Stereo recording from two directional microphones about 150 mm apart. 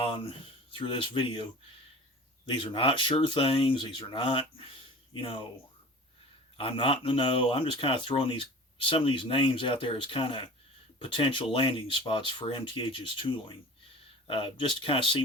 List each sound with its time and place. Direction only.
0.0 s speech: 35° left (ahead or behind)
2.6 s speech: 35° left (ahead or behind)
6.6 s speech: 35° left (ahead or behind)